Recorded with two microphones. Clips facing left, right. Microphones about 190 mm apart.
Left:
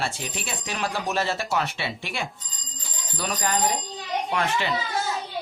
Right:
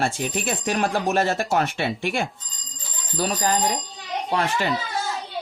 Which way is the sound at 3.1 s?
35° right (ahead or behind).